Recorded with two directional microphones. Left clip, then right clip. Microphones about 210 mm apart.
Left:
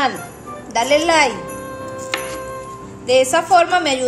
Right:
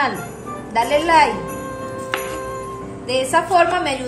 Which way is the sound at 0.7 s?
50° left (ahead or behind).